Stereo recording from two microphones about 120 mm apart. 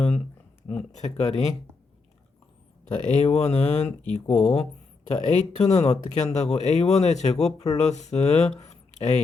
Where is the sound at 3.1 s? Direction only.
65° left (ahead or behind).